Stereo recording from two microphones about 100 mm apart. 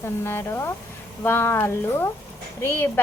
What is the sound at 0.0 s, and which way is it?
A woman's voice, 25° left (ahead or behind).